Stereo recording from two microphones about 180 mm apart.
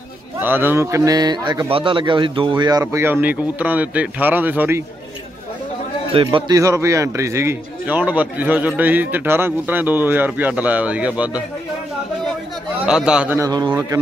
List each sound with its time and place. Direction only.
0.4 s a man's voice: 10° right (ahead or behind)
6.1 s a man's voice: 30° right (ahead or behind)
6.6 s a man's voice: 15° right (ahead or behind)
12.8 s a man's voice: 5° right (ahead or behind)
13.5 s a man's voice: 20° right (ahead or behind)